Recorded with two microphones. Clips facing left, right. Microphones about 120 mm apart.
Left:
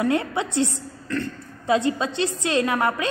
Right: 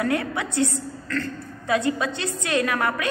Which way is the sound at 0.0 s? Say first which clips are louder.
Left 2 dB; 25° left (ahead or behind).